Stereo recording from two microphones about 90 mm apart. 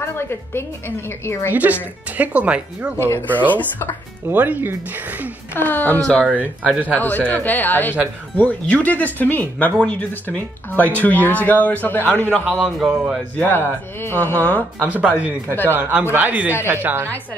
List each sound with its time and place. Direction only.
0.0 s speech: 30° left (ahead or behind)
1.5 s speech: 20° right (ahead or behind)
3.0 s speech: 25° left (ahead or behind)
4.3 s speech: 20° right (ahead or behind)
5.5 s speech: 20° left (ahead or behind)
6.2 s speech: 15° right (ahead or behind)
7.0 s a man's voice: 20° left (ahead or behind)
12.4 s speech: 15° right (ahead or behind)
13.4 s speech: 20° left (ahead or behind)
14.8 s speech: 15° right (ahead or behind)